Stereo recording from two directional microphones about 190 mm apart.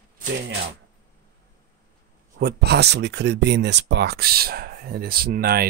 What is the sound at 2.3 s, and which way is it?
Speech, 60° right (ahead or behind).